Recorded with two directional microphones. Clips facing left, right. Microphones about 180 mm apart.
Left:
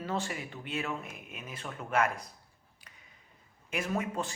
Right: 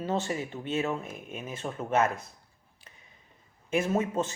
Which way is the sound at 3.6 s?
25° right (ahead or behind).